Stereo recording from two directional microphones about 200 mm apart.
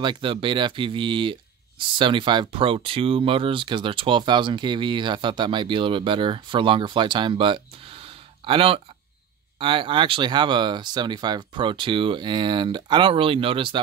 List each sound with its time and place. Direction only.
0.0 s speech: 25° right (ahead or behind)